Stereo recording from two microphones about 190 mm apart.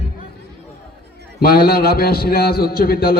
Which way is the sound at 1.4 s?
50° left (ahead or behind).